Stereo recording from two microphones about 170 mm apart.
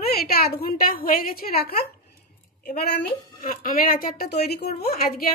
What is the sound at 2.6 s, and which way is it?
A woman's voice, 70° left (ahead or behind).